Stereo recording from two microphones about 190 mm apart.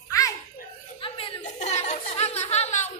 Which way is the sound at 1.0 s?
30° left (ahead or behind).